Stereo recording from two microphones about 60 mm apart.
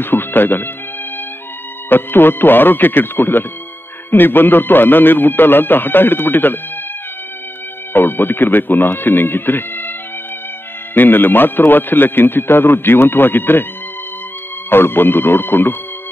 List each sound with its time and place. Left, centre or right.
0.0 s a man's voice: left
1.9 s a man's voice: left
7.9 s a man's voice: left
11.0 s a man's voice: left
14.7 s a man's voice: left